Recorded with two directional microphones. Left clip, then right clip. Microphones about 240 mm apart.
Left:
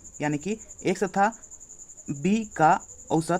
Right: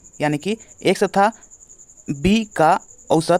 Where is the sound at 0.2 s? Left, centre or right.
Right.